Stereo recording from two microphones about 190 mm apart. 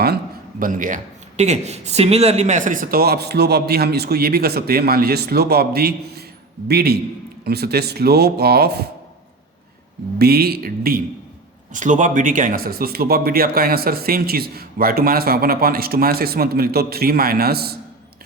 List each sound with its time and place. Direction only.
0.6 s a man's voice: 45° right (ahead or behind)
10.2 s a man's voice: 55° right (ahead or behind)